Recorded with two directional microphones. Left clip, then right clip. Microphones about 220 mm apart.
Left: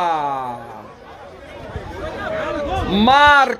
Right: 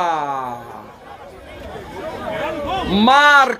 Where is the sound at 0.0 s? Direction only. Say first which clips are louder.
Even; centre (ahead or behind).